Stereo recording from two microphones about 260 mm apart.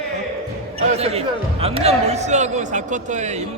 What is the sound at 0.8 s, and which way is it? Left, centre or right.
Speech, right.